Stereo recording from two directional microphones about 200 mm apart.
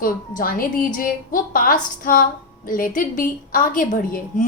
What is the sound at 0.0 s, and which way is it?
A woman's voice, 45° left (ahead or behind).